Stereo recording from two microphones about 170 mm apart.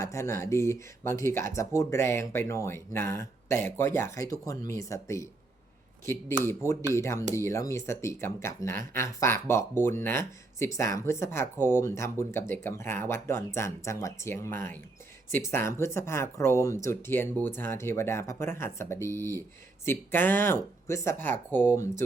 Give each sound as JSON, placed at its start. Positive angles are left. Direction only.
{"t": 0.0, "sound": "speech", "side_deg": 15}
{"t": 6.9, "sound": "speech", "side_deg": 15}